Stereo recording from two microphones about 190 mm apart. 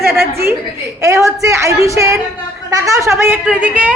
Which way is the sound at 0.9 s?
15° right (ahead or behind).